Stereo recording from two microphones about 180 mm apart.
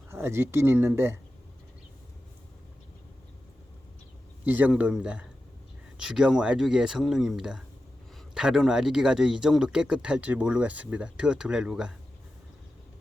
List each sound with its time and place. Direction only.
0.1 s speech: 15° right (ahead or behind)
4.4 s speech: 10° right (ahead or behind)